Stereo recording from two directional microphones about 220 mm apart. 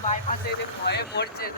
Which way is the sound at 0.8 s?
50° left (ahead or behind).